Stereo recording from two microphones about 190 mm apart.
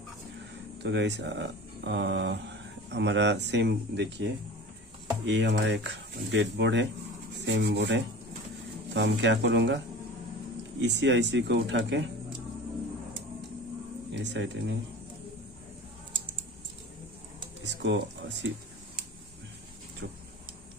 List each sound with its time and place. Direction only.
0.8 s speech: 70° right (ahead or behind)
10.8 s speech: 70° right (ahead or behind)
14.1 s speech: 65° right (ahead or behind)
17.6 s speech: 70° right (ahead or behind)